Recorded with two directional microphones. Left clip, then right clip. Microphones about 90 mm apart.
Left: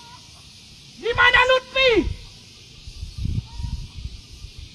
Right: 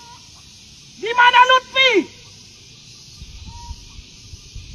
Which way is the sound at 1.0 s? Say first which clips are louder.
Right 4 dB; 5° left (ahead or behind).